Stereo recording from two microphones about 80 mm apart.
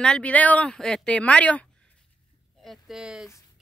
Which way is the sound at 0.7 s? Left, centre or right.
Centre.